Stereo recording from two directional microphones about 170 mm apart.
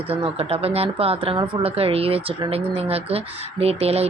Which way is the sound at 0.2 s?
35° right (ahead or behind).